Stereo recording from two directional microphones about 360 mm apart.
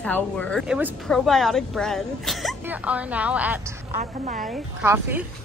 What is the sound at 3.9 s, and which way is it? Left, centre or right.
Speech, right.